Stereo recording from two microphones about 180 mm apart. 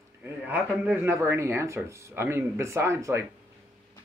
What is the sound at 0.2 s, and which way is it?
Speech, 10° right (ahead or behind).